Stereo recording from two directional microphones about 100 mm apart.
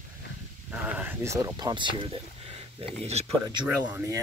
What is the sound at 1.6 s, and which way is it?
Speech, 45° right (ahead or behind).